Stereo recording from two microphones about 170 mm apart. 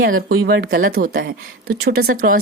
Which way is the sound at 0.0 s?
60° right (ahead or behind).